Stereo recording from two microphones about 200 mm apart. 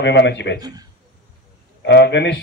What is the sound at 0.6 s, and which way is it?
Speech, 20° right (ahead or behind).